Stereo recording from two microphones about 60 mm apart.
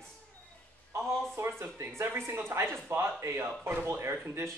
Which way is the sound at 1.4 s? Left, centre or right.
Right.